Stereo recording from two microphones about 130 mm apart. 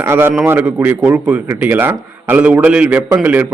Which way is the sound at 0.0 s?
20° right (ahead or behind).